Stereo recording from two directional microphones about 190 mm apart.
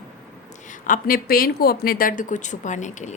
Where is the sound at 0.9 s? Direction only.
50° left (ahead or behind).